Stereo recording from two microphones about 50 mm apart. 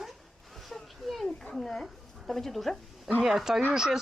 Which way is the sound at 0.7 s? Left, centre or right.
Centre.